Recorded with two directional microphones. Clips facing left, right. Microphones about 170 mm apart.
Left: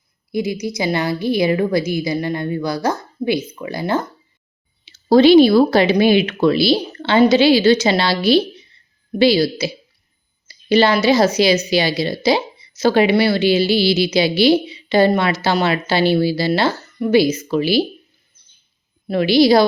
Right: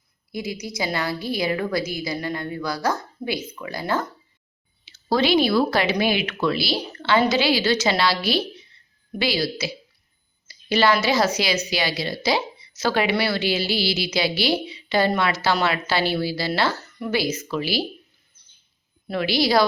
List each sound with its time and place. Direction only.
0.3 s speech: 20° left (ahead or behind)
5.0 s speech: 25° left (ahead or behind)
10.7 s speech: 25° left (ahead or behind)
19.0 s speech: 25° left (ahead or behind)